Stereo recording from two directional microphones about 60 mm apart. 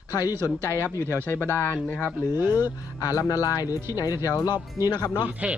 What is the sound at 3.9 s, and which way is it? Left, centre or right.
Speech, left.